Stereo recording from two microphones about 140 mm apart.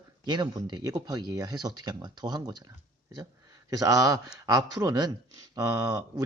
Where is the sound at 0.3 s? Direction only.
30° right (ahead or behind).